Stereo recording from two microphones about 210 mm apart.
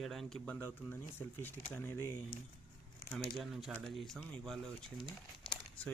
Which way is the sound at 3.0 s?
45° left (ahead or behind).